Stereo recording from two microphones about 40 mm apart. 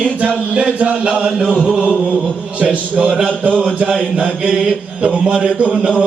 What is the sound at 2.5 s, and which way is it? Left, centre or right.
Speech, right.